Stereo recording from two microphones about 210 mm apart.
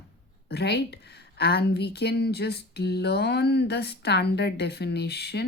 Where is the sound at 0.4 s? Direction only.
50° left (ahead or behind).